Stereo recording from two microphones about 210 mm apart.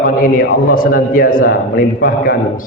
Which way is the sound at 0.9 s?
45° left (ahead or behind).